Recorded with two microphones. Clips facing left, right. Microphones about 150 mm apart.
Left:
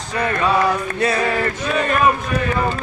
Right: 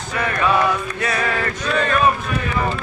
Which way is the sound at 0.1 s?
30° left (ahead or behind).